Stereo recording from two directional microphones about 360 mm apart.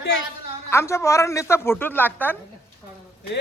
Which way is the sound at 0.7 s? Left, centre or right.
Centre.